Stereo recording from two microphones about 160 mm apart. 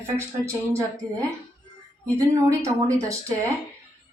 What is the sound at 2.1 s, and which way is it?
Speech, 20° right (ahead or behind).